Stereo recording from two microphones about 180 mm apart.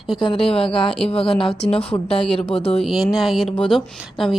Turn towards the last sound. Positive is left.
turn(degrees=0)  # may be behind; listen again after turning